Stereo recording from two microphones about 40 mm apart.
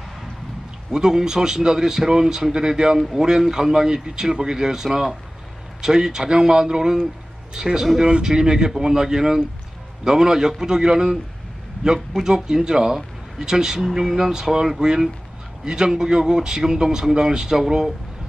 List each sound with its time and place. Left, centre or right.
0.9 s speech: centre
12.2 s speech: centre